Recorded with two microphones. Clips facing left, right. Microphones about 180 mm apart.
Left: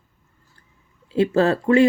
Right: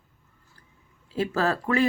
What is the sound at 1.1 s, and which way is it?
Speech, 25° left (ahead or behind).